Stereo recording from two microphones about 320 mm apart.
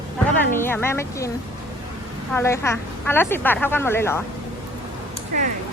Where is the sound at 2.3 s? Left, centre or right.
Centre.